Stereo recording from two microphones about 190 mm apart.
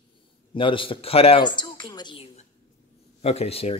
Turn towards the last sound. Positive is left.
turn(degrees=30)  # may be behind; listen again after turning